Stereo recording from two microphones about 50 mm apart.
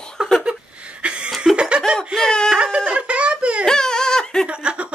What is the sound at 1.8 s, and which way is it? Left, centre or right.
Laughter, centre.